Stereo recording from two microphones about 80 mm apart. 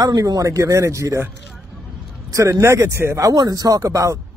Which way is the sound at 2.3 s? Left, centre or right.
Right.